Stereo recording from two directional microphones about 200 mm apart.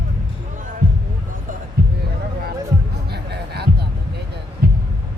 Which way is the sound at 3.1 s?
55° right (ahead or behind).